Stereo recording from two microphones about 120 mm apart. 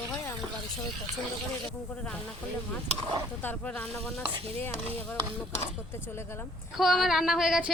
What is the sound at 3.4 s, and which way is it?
Speech, 15° left (ahead or behind).